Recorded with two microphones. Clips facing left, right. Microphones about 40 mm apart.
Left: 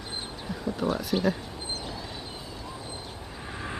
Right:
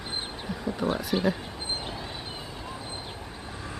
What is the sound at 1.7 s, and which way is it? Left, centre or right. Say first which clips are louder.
Vehicle: right 2 dB; right.